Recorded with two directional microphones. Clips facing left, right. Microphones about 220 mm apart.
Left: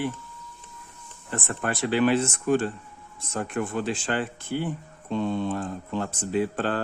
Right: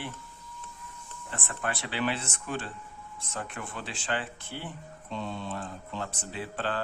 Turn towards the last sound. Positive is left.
turn(degrees=45)  # may be behind; listen again after turning